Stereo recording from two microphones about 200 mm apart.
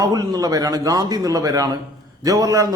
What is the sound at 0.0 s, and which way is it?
A man's voice, 15° right (ahead or behind).